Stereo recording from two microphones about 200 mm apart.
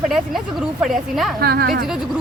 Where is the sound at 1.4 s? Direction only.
50° right (ahead or behind).